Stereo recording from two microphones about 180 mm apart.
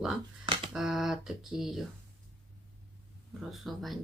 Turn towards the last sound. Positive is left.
turn(degrees=0)  # may be behind; listen again after turning